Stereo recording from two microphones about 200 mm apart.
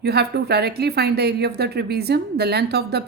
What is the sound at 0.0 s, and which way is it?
A woman's voice, 55° right (ahead or behind).